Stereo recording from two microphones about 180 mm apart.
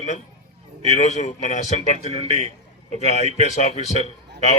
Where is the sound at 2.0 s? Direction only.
35° right (ahead or behind).